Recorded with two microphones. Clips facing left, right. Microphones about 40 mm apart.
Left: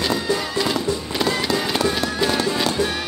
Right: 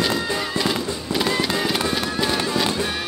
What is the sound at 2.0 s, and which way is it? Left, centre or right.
Music, centre.